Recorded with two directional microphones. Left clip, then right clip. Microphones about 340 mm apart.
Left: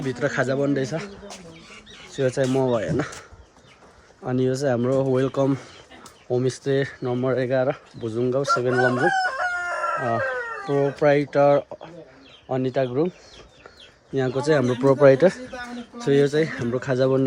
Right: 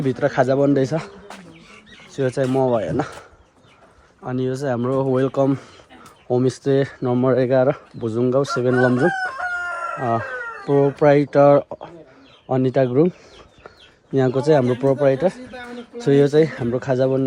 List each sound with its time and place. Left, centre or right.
0.0 s speech: centre
2.1 s speech: centre
14.1 s speech: centre
16.0 s speech: centre